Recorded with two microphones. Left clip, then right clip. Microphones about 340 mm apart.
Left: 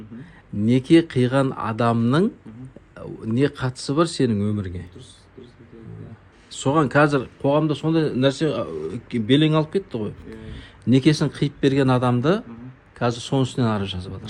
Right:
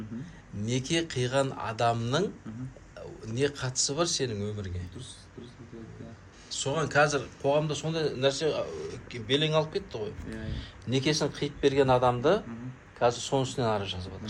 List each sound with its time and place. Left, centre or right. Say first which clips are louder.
0.6 s speech: left 13 dB; centre
6.7 s speech: left 8 dB; centre
14.0 s a man's voice: left 5 dB; left